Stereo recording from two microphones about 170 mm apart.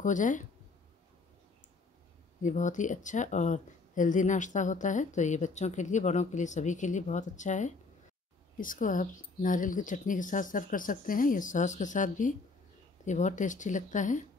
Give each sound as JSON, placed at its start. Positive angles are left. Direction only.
{"t": 0.0, "sound": "speech", "side_deg": 50}
{"t": 2.4, "sound": "speech", "side_deg": 45}